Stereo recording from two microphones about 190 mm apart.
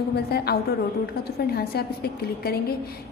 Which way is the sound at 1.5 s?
55° left (ahead or behind).